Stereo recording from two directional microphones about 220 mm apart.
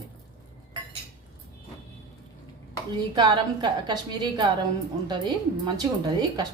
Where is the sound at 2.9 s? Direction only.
20° right (ahead or behind).